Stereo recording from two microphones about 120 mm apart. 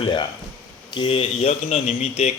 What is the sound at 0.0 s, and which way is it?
Speech, 40° left (ahead or behind).